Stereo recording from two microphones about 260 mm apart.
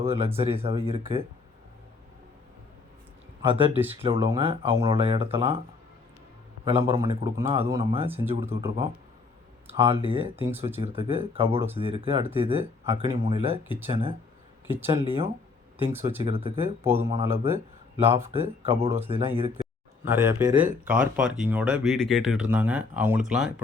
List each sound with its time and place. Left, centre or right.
0.0 s speech: right
3.4 s speech: right
3.8 s speech: centre
6.7 s speech: centre
8.6 s speech: centre
10.3 s speech: centre
10.8 s speech: centre
13.7 s speech: centre
13.9 s speech: right
14.7 s speech: centre
15.0 s speech: right
16.6 s speech: centre
18.3 s speech: right
20.1 s speech: centre